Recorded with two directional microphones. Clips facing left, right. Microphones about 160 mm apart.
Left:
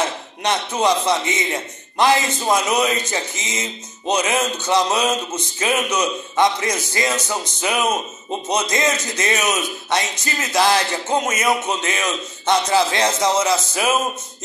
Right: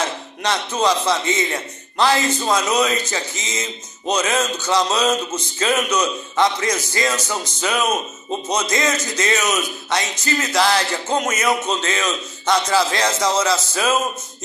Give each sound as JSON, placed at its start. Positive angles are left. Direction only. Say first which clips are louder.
{"t": 0.4, "sound": "a man's voice", "louder": "left 1 dB", "side_deg": 20}